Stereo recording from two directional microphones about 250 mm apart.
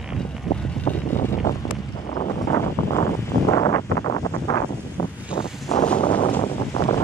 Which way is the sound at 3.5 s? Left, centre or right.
Centre.